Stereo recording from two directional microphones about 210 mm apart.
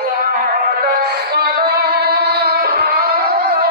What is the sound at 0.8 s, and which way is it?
Music, 50° right (ahead or behind).